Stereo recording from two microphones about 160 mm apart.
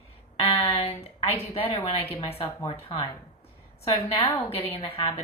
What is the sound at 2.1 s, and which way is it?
Speech, 35° left (ahead or behind).